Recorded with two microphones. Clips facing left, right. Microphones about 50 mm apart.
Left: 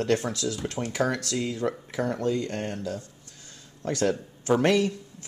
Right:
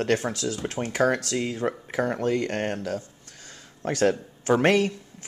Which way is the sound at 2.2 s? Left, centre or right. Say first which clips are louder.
Right 3 dB; right.